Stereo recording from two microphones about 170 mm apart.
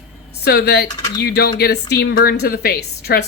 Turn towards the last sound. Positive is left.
turn(degrees=70)  # may be behind; listen again after turning